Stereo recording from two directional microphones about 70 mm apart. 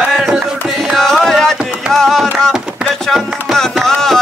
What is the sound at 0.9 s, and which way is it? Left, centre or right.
Music, centre.